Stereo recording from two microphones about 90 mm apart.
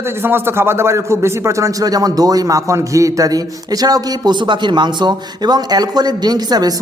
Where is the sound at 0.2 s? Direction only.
25° right (ahead or behind).